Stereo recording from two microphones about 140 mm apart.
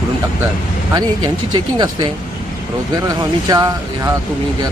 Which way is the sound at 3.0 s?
25° right (ahead or behind).